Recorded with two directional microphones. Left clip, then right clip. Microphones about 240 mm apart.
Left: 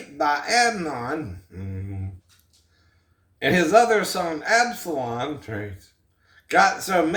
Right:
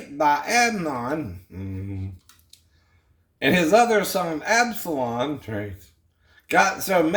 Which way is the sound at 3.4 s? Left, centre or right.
Right.